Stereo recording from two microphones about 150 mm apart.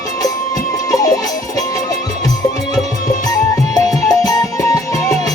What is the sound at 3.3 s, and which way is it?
Music, 25° left (ahead or behind).